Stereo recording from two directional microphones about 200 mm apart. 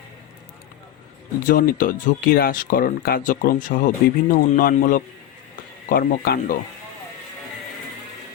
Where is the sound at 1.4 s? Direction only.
45° left (ahead or behind).